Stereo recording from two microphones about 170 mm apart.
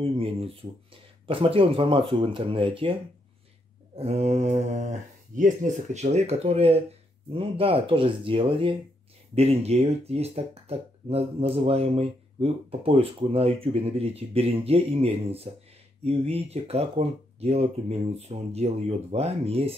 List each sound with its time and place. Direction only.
0.0 s speech: 35° right (ahead or behind)